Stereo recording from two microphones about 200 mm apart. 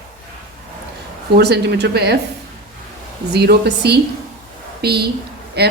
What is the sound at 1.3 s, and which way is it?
Speech, 55° right (ahead or behind).